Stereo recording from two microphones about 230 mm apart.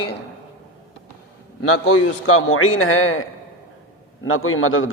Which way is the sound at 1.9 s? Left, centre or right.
Left.